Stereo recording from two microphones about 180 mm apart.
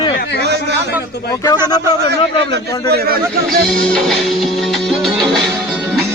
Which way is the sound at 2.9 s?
60° right (ahead or behind).